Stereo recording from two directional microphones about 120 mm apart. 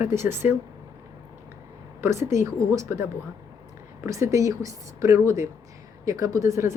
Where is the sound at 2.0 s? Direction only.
25° right (ahead or behind).